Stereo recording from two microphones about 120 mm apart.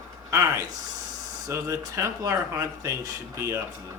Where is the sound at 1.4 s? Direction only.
25° right (ahead or behind).